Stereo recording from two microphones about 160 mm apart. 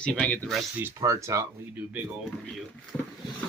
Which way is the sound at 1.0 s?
20° right (ahead or behind).